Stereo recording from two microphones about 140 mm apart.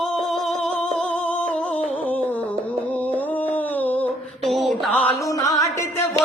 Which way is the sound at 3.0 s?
10° left (ahead or behind).